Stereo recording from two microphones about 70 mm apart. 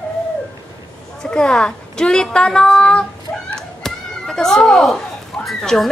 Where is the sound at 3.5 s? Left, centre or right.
Centre.